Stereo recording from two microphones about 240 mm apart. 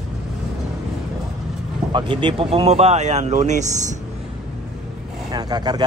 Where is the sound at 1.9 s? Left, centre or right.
Right.